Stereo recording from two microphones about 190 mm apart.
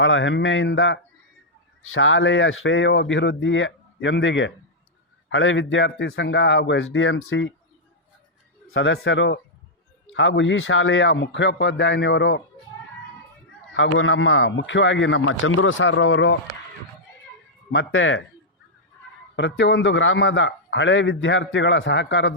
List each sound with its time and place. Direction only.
0.0 s a man's voice: 80° left
1.9 s a man's voice: 90° left; by 4.5 s 70° left (ahead or behind)
5.3 s a man's voice: 90° left
8.7 s a man's voice: 80° left
14.0 s a man's voice: 90° left
17.7 s speech: 85° left
19.4 s a man's voice: 70° left (ahead or behind)